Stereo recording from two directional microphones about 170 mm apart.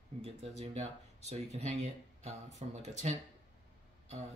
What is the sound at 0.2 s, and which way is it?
Speech, 40° right (ahead or behind).